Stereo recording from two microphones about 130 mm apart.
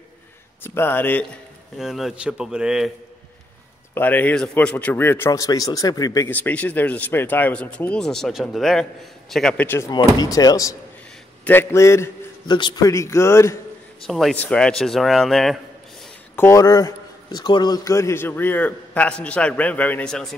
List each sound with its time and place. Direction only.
0.7 s a man's voice: 15° left (ahead or behind)
1.8 s a man's voice: centre (ahead or behind)
3.9 s a man's voice: 15° left (ahead or behind)
6.3 s a man's voice: 10° left (ahead or behind)
9.7 s speech: 20° left (ahead or behind)
12.4 s a man's voice: 40° left (ahead or behind)
12.8 s speech: 25° left (ahead or behind)
14.0 s a man's voice: centre (ahead or behind)
16.3 s a man's voice: 25° left (ahead or behind); by 20.3 s 5° left (ahead or behind)